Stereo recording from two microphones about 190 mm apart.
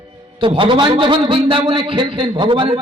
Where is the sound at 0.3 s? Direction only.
25° right (ahead or behind).